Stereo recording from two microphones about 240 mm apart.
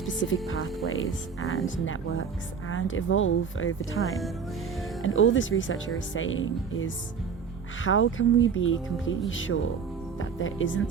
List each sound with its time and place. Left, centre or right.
0.4 s speech: left
5.0 s speech: left